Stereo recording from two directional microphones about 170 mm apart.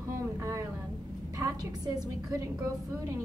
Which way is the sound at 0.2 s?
15° right (ahead or behind).